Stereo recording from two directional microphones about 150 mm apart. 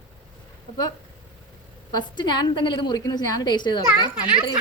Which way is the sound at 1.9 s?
30° left (ahead or behind).